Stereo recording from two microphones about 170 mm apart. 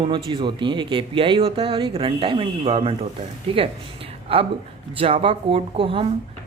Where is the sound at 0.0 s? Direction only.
30° right (ahead or behind).